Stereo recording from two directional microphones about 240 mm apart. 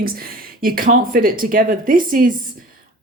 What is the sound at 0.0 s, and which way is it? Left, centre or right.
Speech, right.